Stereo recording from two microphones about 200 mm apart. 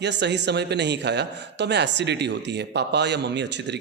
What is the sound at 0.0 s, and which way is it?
A man's voice, 60° right (ahead or behind).